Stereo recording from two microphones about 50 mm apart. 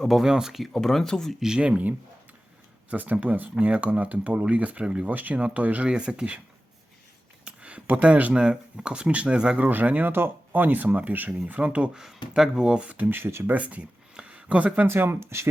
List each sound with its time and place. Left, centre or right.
0.0 s speech: centre
0.6 s speech: centre
1.4 s speech: centre
2.9 s speech: right
5.9 s speech: centre
7.4 s speech: right
9.6 s speech: right
10.1 s speech: right
12.4 s speech: centre
13.1 s speech: right
13.5 s speech: right
14.2 s a sound: right
14.8 s speech: right